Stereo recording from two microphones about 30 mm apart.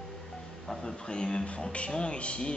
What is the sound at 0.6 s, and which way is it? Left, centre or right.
Speech, left.